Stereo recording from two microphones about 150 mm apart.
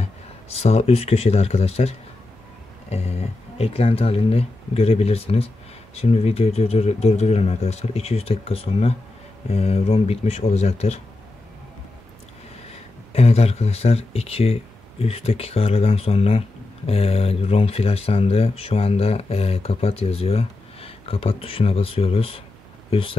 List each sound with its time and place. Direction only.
0.0 s speech: 45° left (ahead or behind)
13.1 s speech: 45° left (ahead or behind)